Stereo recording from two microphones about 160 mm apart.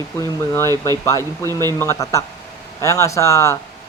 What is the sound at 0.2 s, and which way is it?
Speech, 20° left (ahead or behind).